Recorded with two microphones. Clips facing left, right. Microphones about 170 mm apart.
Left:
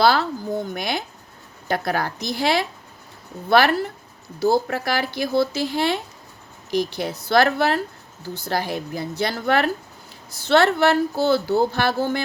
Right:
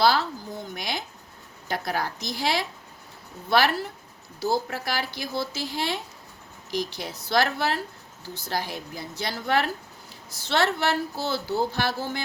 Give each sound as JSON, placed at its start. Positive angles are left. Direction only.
{"t": 0.0, "sound": "speech", "side_deg": 60}